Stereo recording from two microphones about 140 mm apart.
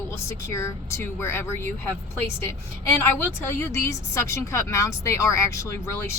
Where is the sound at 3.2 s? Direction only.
15° left (ahead or behind).